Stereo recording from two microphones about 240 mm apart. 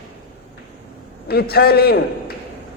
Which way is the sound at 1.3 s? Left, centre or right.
Left.